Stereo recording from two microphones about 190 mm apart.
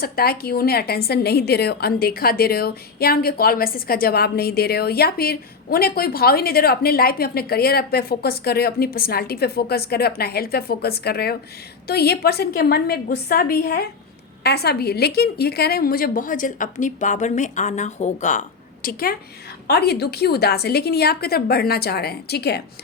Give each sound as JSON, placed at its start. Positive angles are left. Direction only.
{"t": 0.0, "sound": "a woman's voice", "side_deg": 55}